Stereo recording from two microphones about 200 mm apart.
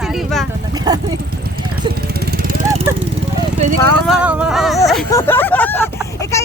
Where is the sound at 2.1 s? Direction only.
50° right (ahead or behind).